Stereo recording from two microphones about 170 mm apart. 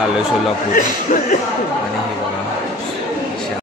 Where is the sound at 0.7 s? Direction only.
50° left (ahead or behind).